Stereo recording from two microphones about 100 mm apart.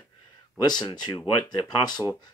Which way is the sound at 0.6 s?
50° left (ahead or behind).